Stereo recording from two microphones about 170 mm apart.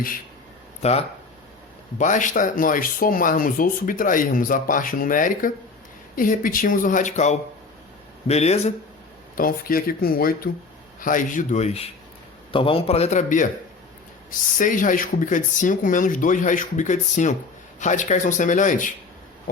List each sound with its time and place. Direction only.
0.8 s a man's voice: 40° left (ahead or behind)
9.4 s a man's voice: 60° left (ahead or behind)